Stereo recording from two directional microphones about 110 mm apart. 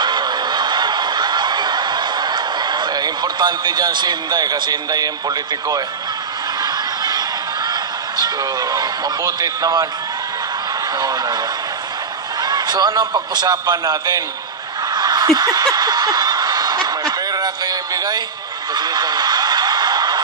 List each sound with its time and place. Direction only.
0.0 s snicker: 40° right (ahead or behind)
8.2 s a man's voice: 35° right (ahead or behind)
11.0 s a man's voice: 35° right (ahead or behind)
12.4 s a man's voice: 40° right (ahead or behind)
15.0 s snicker: 35° right (ahead or behind)